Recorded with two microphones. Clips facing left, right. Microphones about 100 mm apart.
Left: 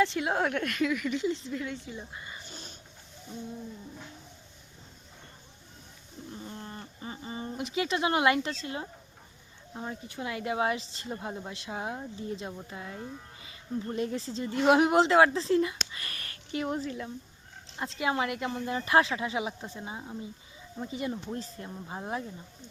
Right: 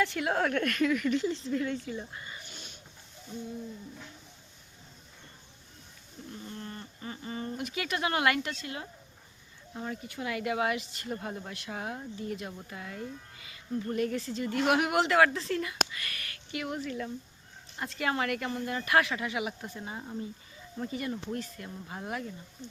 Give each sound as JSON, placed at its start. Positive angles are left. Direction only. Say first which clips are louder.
{"t": 0.0, "sound": "a woman's voice", "louder": "left 2 dB", "side_deg": 20}
{"t": 1.2, "sound": "speech", "louder": "right 1 dB", "side_deg": 0}
{"t": 2.5, "sound": "a sound", "louder": "left 3 dB", "side_deg": 40}
{"t": 6.3, "sound": "a woman's voice", "louder": "even", "side_deg": 20}
{"t": 15.9, "sound": "a sound", "louder": "right 1 dB", "side_deg": 30}
{"t": 17.7, "sound": "a woman's voice", "louder": "left 2 dB", "side_deg": 20}
{"t": 19.8, "sound": "a woman's voice", "louder": "right 1 dB", "side_deg": 10}